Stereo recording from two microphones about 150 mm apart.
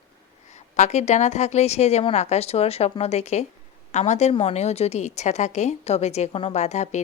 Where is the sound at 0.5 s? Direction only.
50° left (ahead or behind).